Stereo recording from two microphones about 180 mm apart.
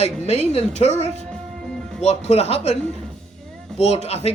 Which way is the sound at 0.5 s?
35° left (ahead or behind).